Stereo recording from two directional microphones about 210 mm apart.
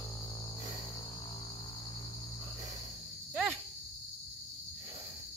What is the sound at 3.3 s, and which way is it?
Cricket, centre (ahead or behind).